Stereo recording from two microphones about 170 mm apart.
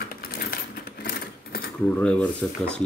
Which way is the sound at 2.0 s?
5° left (ahead or behind).